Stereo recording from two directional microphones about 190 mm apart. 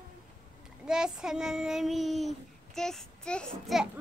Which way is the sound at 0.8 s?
5° right (ahead or behind).